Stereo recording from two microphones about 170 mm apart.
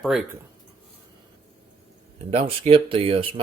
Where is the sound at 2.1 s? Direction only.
30° right (ahead or behind).